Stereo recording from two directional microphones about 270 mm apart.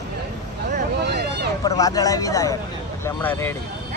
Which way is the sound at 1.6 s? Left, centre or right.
Centre.